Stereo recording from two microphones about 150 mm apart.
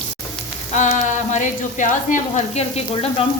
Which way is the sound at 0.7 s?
55° left (ahead or behind).